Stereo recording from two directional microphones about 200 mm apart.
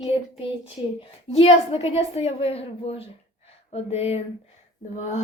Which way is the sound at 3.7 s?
30° left (ahead or behind).